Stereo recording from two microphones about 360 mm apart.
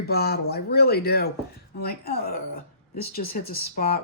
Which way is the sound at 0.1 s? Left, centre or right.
Left.